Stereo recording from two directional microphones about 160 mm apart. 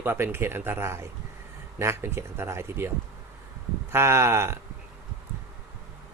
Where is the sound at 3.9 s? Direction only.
15° right (ahead or behind).